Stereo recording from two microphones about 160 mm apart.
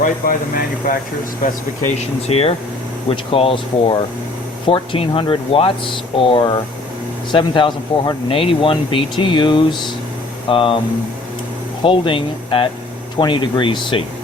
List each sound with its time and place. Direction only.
0.0 s speech: 60° left (ahead or behind)
2.2 s speech: 40° left (ahead or behind)
11.8 s speech: 35° left (ahead or behind)